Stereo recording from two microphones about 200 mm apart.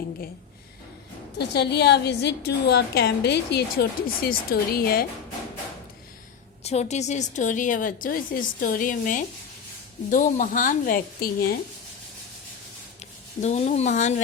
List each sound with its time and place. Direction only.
1.4 s a woman's voice: 55° left (ahead or behind)
6.7 s a woman's voice: 35° left (ahead or behind)
13.4 s a woman's voice: 35° left (ahead or behind)